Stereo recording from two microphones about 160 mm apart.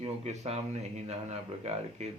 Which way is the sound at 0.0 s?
40° right (ahead or behind).